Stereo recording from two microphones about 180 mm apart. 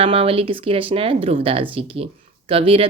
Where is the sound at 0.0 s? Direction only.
30° right (ahead or behind).